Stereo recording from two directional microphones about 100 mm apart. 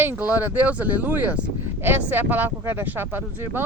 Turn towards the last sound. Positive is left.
turn(degrees=-20)  # may be behind; listen again after turning